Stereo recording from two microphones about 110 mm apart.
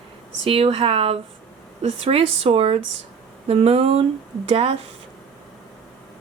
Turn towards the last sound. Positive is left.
turn(degrees=-65)  # may be behind; listen again after turning